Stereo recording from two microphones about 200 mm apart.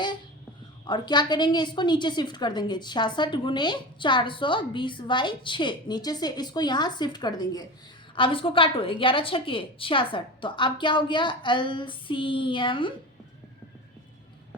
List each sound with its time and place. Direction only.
0.9 s a woman's voice: 20° left (ahead or behind)